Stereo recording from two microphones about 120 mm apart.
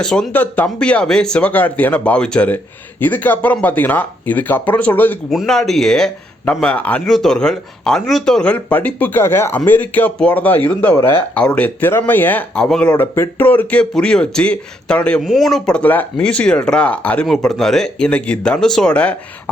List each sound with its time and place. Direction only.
0.0 s speech: 5° left (ahead or behind)
5.3 s speech: centre (ahead or behind)
12.6 s speech: 5° left (ahead or behind)
12.9 s speech: 15° left (ahead or behind)